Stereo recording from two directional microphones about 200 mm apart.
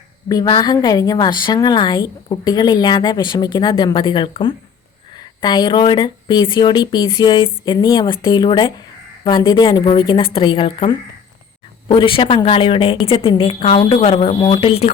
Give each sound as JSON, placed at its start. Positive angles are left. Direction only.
{"t": 0.3, "sound": "a woman's voice", "side_deg": 20}